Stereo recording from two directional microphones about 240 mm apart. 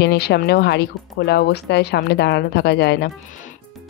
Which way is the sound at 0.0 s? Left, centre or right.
Left.